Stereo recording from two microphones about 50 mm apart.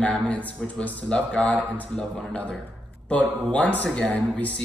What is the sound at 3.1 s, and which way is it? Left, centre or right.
Speech, left.